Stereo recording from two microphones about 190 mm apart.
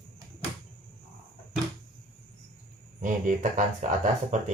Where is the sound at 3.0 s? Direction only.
40° right (ahead or behind).